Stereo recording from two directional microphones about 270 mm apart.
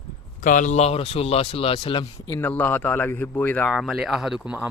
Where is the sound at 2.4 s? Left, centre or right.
Centre.